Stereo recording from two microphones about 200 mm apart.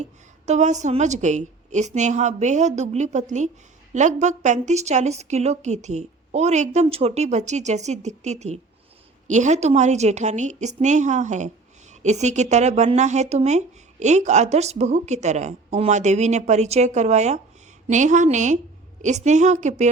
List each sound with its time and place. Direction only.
0.0 s a woman's voice: 35° right (ahead or behind)